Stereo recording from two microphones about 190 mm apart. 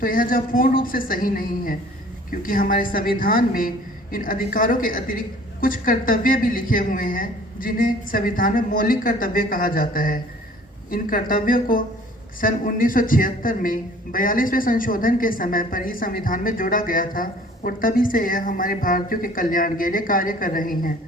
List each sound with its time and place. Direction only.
0.0 s a man's voice: 45° left (ahead or behind)